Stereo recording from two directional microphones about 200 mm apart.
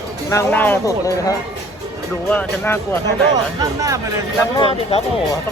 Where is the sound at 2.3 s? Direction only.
10° left (ahead or behind).